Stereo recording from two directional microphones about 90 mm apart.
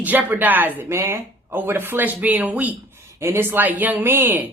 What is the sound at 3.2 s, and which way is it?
A woman's voice, 25° right (ahead or behind).